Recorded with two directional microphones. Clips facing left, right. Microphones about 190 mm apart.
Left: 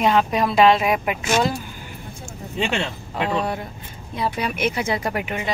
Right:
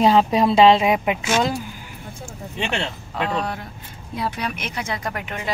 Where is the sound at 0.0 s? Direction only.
30° right (ahead or behind).